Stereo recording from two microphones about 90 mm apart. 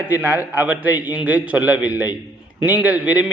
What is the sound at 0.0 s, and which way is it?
A man's voice, 20° right (ahead or behind).